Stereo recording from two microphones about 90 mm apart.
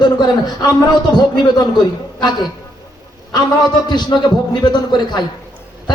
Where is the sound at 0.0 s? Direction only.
50° left (ahead or behind).